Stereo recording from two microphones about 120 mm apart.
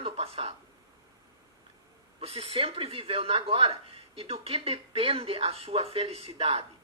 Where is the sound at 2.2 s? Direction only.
55° right (ahead or behind).